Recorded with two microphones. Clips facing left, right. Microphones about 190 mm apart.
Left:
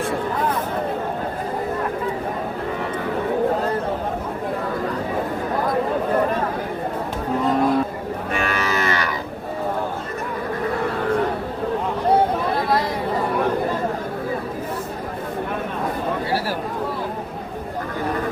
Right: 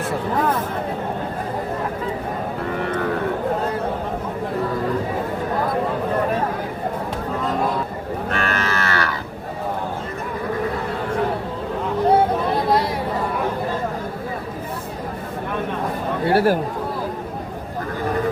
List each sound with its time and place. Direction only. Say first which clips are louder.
8.3 s livestock: left 1 dB; 10° left (ahead or behind)
16.3 s chatter: right 12 dB; 55° right (ahead or behind)